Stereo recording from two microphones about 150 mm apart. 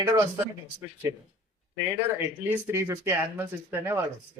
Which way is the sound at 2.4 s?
15° right (ahead or behind).